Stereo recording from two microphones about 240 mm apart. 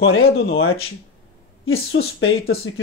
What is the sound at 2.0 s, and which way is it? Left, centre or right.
Speech, left.